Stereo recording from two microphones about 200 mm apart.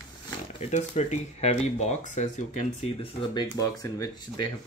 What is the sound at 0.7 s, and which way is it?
Speech, 35° left (ahead or behind).